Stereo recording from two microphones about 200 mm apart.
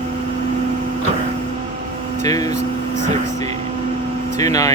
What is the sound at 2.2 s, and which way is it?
Speech, 20° left (ahead or behind).